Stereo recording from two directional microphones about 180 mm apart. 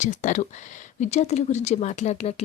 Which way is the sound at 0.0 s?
45° left (ahead or behind).